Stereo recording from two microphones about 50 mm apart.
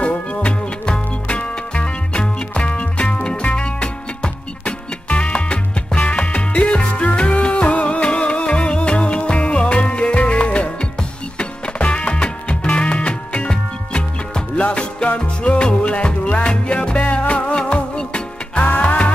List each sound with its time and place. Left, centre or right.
0.0 s music: left